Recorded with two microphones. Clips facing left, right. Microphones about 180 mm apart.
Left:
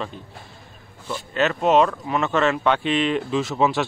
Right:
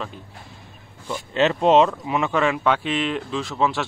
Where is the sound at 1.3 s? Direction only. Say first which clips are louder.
Right 2 dB; 25° right (ahead or behind).